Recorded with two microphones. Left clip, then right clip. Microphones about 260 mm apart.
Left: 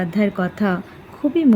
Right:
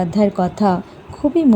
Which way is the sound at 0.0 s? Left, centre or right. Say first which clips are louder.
Right 4 dB; centre.